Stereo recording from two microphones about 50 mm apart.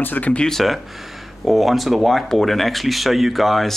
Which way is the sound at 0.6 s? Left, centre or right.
Centre.